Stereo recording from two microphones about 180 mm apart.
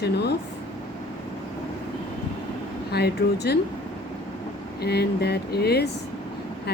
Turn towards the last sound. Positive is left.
turn(degrees=65)  # may be behind; listen again after turning